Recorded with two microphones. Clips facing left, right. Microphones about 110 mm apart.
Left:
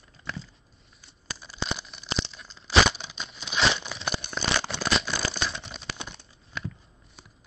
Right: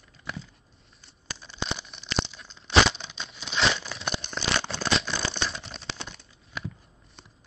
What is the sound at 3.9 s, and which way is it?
Crumpling, 5° left (ahead or behind).